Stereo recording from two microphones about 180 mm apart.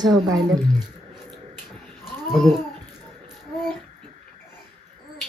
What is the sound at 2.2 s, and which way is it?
Speech, centre (ahead or behind).